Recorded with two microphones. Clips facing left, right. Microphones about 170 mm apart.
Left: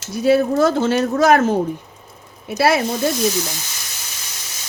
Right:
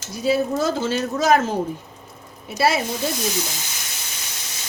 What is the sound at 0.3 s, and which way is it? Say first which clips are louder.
Speech: left 5 dB; 60° left (ahead or behind).